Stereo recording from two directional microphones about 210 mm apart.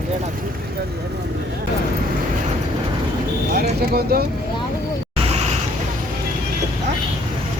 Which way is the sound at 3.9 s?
45° right (ahead or behind).